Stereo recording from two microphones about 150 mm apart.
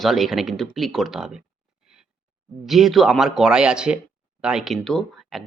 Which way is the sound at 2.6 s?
Centre (ahead or behind).